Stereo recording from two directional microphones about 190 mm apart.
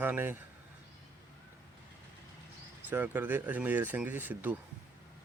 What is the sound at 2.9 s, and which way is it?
Speech, 10° right (ahead or behind).